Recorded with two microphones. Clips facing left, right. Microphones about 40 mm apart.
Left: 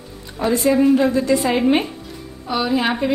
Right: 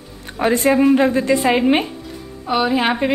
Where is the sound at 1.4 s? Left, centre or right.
Centre.